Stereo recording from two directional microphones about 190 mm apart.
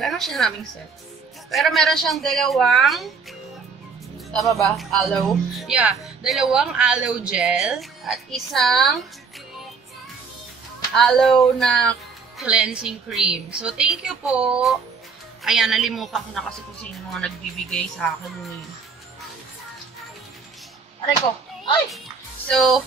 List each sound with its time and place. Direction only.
0.0 s speech: centre (ahead or behind)
4.3 s speech: centre (ahead or behind)
11.0 s speech: centre (ahead or behind)
22.5 s speech: centre (ahead or behind)